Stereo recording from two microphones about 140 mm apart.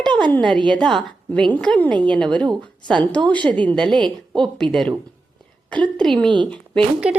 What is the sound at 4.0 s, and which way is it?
Speech, 35° right (ahead or behind).